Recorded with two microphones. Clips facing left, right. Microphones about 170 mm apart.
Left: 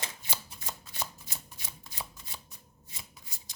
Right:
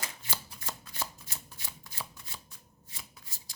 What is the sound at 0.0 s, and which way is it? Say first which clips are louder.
Shuffling cards: even; 20° left (ahead or behind).